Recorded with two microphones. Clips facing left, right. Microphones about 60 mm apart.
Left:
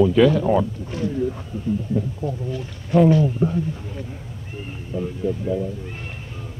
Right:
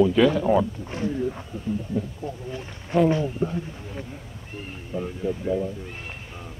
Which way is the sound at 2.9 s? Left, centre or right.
Right.